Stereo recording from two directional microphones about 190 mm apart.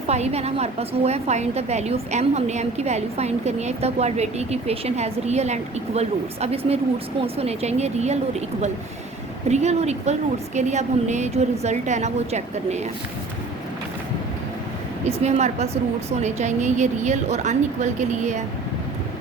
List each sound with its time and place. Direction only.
0.1 s a woman's voice: 35° right (ahead or behind)
9.5 s a woman's voice: 35° right (ahead or behind)
15.0 s a woman's voice: 35° right (ahead or behind)